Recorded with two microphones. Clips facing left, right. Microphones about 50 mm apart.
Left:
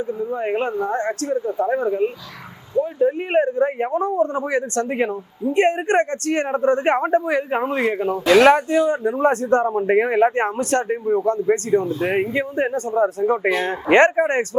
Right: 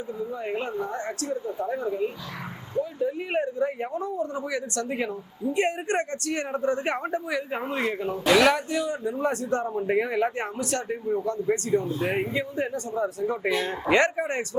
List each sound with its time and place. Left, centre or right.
0.1 s speech: left
10.9 s speech: left